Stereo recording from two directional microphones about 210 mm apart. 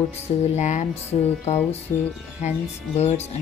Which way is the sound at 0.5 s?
35° left (ahead or behind).